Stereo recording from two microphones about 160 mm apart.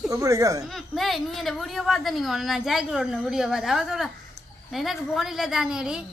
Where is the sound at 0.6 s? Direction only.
Centre (ahead or behind).